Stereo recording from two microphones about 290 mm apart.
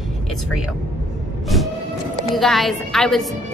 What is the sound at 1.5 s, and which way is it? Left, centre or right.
Music, centre.